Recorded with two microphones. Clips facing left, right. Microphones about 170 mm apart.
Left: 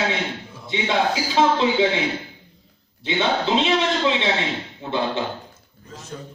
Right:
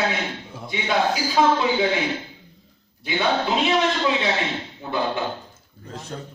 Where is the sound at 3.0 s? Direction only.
25° left (ahead or behind).